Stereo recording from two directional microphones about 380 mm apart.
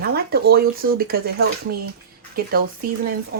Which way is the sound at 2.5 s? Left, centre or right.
Right.